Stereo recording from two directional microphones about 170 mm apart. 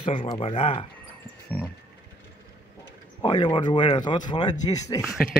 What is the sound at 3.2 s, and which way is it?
Speech, 30° left (ahead or behind).